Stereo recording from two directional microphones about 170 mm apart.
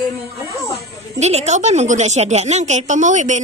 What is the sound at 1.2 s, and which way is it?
A woman's voice, 40° right (ahead or behind).